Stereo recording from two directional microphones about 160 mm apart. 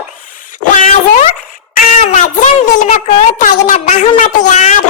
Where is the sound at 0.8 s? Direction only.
50° left (ahead or behind).